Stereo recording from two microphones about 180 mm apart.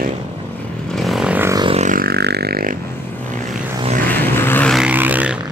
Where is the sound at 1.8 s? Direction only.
50° right (ahead or behind).